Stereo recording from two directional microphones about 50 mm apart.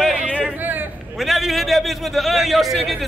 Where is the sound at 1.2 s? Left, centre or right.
Centre.